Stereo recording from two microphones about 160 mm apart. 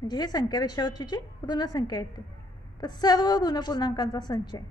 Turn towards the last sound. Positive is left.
turn(degrees=25)  # may be behind; listen again after turning